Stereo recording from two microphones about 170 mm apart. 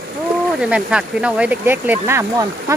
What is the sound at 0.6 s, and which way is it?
Speech, 5° right (ahead or behind).